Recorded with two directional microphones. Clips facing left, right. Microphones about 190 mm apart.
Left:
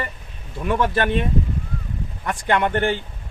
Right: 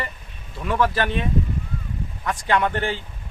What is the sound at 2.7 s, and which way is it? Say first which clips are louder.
Speech: left 5 dB; 55° left (ahead or behind).